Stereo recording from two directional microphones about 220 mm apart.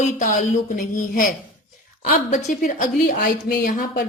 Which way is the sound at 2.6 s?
35° left (ahead or behind).